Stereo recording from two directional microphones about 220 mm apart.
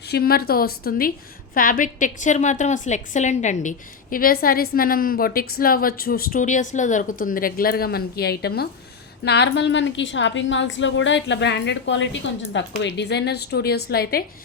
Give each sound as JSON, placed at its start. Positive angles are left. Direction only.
{"t": 0.1, "sound": "a woman's voice", "side_deg": 45}